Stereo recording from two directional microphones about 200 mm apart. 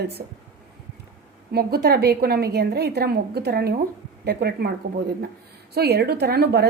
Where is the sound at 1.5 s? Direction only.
50° right (ahead or behind).